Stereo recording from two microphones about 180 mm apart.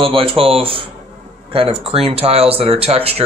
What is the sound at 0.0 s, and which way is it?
Speech, 30° right (ahead or behind).